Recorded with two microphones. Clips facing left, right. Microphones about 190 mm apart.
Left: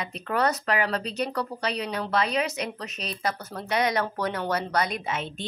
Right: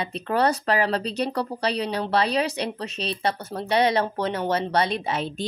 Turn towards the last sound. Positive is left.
turn(degrees=-35)  # may be behind; listen again after turning